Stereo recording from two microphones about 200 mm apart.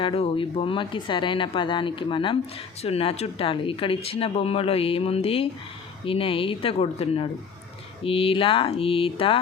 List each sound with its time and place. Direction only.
0.0 s speech: 25° left (ahead or behind)